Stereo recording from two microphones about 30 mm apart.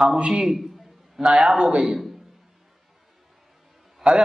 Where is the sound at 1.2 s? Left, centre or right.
Centre.